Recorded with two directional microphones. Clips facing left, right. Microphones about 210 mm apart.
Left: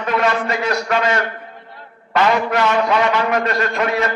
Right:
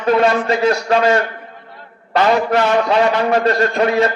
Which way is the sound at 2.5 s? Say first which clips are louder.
Right 2 dB; 30° right (ahead or behind).